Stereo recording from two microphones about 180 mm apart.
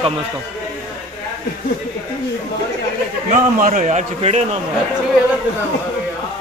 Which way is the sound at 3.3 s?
45° right (ahead or behind).